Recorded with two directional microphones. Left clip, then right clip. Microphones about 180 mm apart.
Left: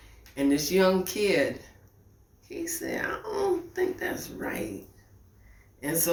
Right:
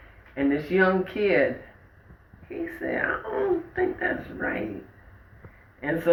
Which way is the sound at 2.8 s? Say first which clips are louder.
Right 6 dB; 20° left (ahead or behind).